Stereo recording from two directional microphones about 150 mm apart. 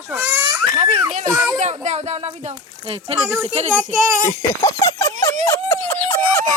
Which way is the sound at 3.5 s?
50° right (ahead or behind).